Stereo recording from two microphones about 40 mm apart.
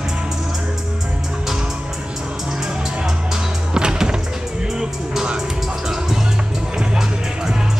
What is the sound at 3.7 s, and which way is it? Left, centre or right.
Music, centre.